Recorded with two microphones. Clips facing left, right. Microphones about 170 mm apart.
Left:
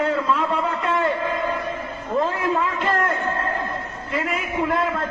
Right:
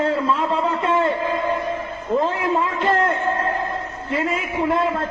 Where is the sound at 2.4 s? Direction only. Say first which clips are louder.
Right 2 dB; 25° right (ahead or behind).